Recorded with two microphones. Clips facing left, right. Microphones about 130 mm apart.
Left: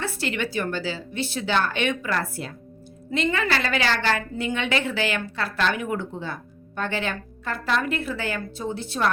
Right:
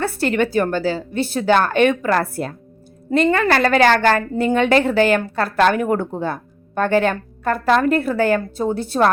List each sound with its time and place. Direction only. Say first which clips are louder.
0.0 s a woman's voice: right 9 dB; 50° right (ahead or behind)